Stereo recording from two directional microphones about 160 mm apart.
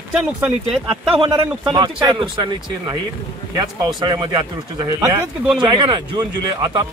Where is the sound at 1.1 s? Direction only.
35° right (ahead or behind).